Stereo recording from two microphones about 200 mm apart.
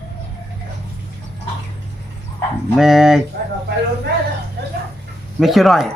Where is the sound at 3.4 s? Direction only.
50° right (ahead or behind).